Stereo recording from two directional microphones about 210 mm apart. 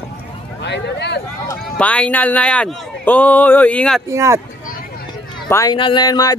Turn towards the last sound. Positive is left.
turn(degrees=15)  # may be behind; listen again after turning